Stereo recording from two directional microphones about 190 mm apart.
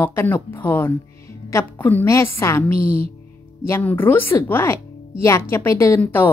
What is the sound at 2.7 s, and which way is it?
Speech, 30° right (ahead or behind).